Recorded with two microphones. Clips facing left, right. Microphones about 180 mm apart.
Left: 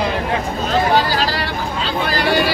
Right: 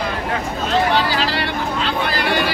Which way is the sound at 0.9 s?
40° left (ahead or behind).